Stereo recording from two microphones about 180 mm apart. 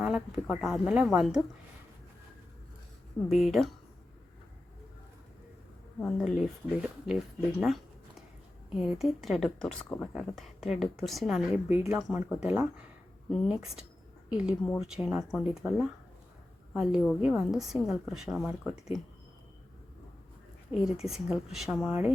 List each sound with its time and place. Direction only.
0.0 s a woman's voice: centre (ahead or behind)
3.2 s a woman's voice: centre (ahead or behind)
6.0 s a woman's voice: 5° left (ahead or behind)
8.7 s a woman's voice: 5° right (ahead or behind)
11.8 s speech: 15° right (ahead or behind)
12.0 s a woman's voice: 5° right (ahead or behind)
13.3 s a woman's voice: centre (ahead or behind)
20.7 s a woman's voice: 5° right (ahead or behind)